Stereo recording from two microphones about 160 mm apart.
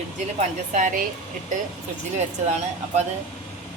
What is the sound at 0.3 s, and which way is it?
A woman's voice, 50° right (ahead or behind).